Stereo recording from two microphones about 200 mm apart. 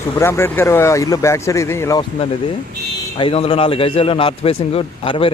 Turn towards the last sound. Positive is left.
turn(degrees=25)  # may be behind; listen again after turning